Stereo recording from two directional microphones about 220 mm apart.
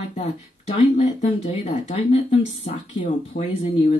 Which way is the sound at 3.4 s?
35° left (ahead or behind).